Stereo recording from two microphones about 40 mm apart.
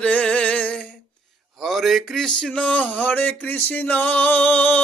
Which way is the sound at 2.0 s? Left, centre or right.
Centre.